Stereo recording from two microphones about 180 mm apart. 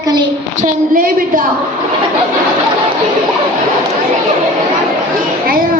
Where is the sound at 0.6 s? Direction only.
50° right (ahead or behind).